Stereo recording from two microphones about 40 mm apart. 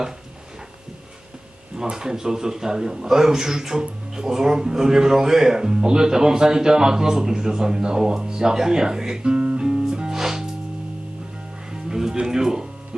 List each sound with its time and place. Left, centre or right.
1.7 s a man's voice: centre
9.6 s music: centre
11.7 s music: centre